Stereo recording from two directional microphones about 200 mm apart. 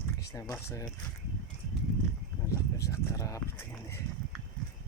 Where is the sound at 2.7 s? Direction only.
15° left (ahead or behind).